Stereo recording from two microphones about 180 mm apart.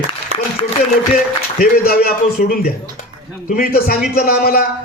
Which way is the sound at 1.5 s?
55° left (ahead or behind).